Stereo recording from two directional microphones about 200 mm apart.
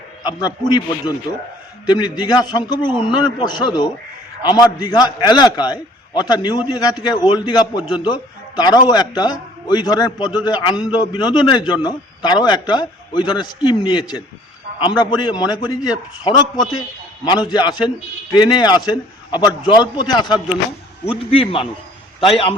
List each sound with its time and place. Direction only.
0.2 s a man's voice: 20° left (ahead or behind)
1.9 s a man's voice: 20° left (ahead or behind)